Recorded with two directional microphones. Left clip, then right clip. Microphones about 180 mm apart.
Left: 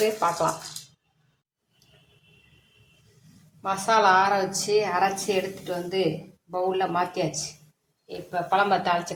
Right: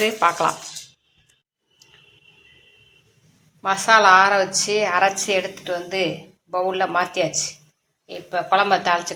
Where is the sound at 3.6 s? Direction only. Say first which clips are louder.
Right 6 dB; 10° right (ahead or behind).